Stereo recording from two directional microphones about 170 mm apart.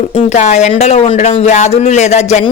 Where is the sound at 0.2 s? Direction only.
40° left (ahead or behind).